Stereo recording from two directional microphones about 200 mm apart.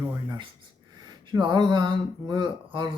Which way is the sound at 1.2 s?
25° right (ahead or behind).